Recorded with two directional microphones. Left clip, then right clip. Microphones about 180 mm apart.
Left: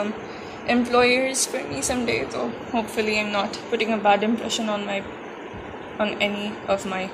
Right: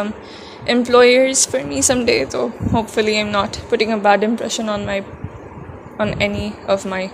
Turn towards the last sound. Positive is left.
turn(degrees=-50)  # may be behind; listen again after turning